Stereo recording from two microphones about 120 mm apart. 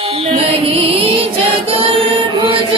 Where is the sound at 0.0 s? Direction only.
55° right (ahead or behind).